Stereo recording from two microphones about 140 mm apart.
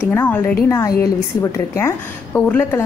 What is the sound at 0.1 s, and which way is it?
A woman's voice, 15° left (ahead or behind).